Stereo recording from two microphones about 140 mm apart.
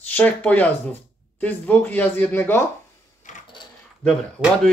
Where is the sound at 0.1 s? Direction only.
10° left (ahead or behind).